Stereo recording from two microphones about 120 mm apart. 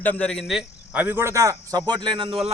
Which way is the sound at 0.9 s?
15° right (ahead or behind).